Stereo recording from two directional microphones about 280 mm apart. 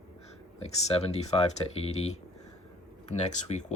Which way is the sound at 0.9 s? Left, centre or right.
Left.